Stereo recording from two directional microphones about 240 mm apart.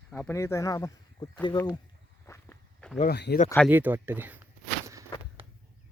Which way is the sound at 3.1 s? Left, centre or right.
Left.